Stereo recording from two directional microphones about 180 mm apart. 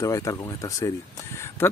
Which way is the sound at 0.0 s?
20° left (ahead or behind).